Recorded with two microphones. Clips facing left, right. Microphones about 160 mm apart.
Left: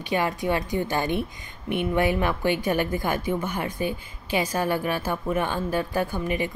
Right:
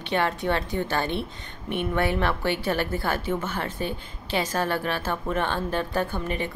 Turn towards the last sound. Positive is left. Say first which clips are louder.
# left 2 dB
turn(degrees=10)  # may be behind; listen again after turning